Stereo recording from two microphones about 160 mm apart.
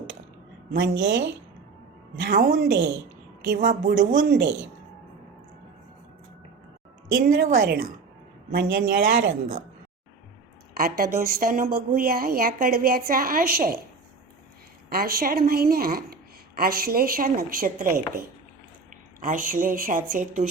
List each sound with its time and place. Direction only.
0.7 s a woman's voice: 90° right
2.1 s a woman's voice: 75° right (ahead or behind)
3.4 s a woman's voice: 75° right (ahead or behind)
7.1 s a woman's voice: 75° right (ahead or behind)
8.4 s a man's voice: 90° right
10.8 s a woman's voice: 75° right (ahead or behind)
14.8 s a woman's voice: 70° right (ahead or behind); by 20.5 s 55° right (ahead or behind)